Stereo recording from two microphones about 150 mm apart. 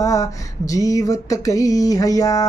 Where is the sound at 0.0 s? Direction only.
20° left (ahead or behind).